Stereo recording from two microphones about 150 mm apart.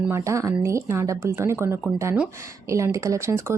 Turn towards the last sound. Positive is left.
turn(degrees=-20)  # may be behind; listen again after turning